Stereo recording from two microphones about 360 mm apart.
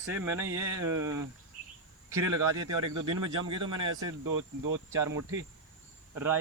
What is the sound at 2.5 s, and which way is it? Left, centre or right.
Speech, right.